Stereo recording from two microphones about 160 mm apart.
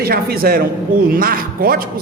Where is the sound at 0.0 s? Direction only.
75° right (ahead or behind).